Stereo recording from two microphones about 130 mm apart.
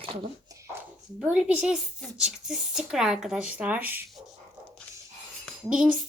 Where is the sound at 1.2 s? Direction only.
10° right (ahead or behind).